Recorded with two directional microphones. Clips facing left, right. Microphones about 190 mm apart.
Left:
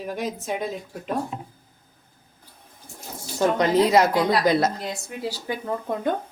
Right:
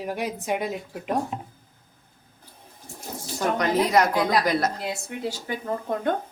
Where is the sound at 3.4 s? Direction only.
25° left (ahead or behind).